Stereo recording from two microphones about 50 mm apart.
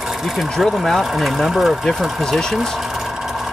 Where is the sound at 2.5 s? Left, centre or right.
Centre.